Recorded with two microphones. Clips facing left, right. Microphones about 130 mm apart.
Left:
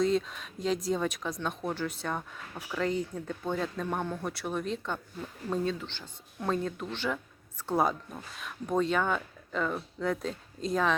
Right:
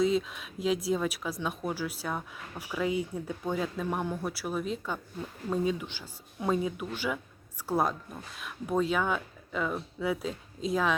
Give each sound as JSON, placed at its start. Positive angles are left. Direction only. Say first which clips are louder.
{"t": 0.0, "sound": "speech", "louder": "even", "side_deg": -5}